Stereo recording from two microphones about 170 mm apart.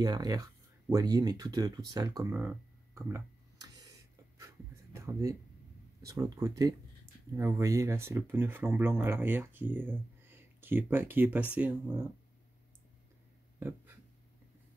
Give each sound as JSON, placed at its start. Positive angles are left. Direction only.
{"t": 0.0, "sound": "speech", "side_deg": -25}
{"t": 2.3, "sound": "a sound", "side_deg": -10}
{"t": 4.4, "sound": "writing", "side_deg": -15}
{"t": 6.0, "sound": "speech", "side_deg": -20}